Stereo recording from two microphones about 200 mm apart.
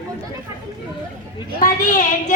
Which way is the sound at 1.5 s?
40° left (ahead or behind).